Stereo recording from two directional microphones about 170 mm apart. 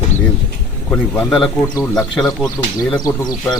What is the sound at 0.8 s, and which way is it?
A man's voice, 10° left (ahead or behind).